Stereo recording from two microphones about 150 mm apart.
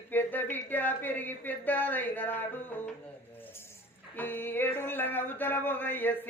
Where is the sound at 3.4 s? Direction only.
15° left (ahead or behind).